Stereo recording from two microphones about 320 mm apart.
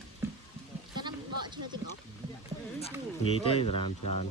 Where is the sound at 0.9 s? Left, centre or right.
Centre.